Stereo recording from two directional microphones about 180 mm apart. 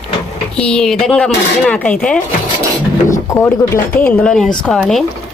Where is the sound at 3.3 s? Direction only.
15° left (ahead or behind).